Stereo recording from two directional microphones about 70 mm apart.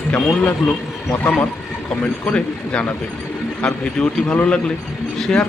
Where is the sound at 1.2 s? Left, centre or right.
Centre.